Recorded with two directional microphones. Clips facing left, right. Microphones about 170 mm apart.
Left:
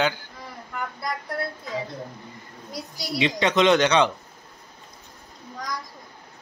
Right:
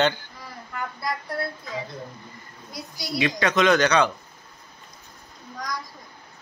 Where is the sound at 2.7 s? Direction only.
35° left (ahead or behind).